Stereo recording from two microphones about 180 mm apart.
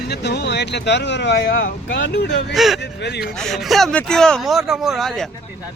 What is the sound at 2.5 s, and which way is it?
Speech, centre (ahead or behind).